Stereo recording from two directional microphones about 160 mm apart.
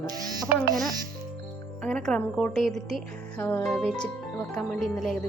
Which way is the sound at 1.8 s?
5° left (ahead or behind).